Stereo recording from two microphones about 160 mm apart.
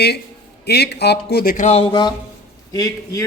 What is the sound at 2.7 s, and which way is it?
Speech, 20° left (ahead or behind).